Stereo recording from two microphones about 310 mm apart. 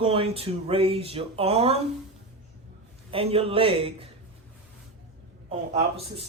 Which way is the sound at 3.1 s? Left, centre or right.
Centre.